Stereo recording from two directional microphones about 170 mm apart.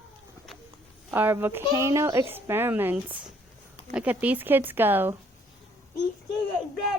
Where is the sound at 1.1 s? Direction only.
10° right (ahead or behind).